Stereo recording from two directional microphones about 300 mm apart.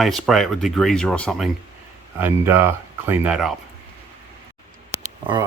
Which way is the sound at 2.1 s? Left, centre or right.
Centre.